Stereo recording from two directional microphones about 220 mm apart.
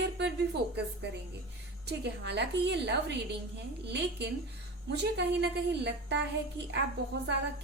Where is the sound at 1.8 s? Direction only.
50° right (ahead or behind).